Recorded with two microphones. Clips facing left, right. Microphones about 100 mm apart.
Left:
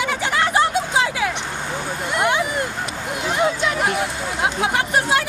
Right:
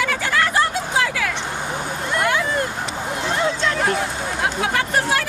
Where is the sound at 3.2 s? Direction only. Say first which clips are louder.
Left 2 dB; 15° left (ahead or behind).